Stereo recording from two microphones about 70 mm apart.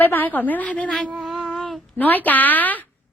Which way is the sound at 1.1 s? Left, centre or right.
Centre.